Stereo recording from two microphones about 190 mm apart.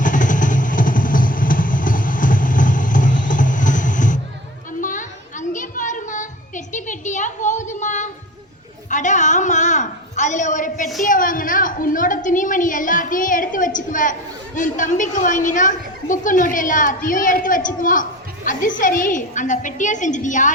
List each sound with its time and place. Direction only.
0.0 s vehicle: 45° left (ahead or behind)
4.8 s a sound: 45° left (ahead or behind)
18.8 s music: 45° left (ahead or behind)